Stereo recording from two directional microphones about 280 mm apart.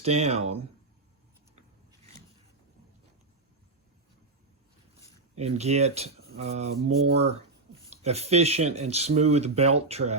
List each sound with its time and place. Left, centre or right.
0.0 s speech: right
5.3 s speech: right